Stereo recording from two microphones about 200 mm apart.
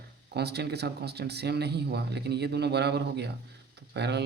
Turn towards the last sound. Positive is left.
turn(degrees=-55)  # may be behind; listen again after turning